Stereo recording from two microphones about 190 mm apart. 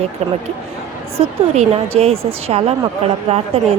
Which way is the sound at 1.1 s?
30° right (ahead or behind).